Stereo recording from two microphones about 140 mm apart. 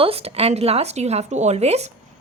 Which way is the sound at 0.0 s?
45° right (ahead or behind).